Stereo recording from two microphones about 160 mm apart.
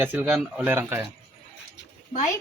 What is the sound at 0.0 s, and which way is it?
Speech, 10° right (ahead or behind).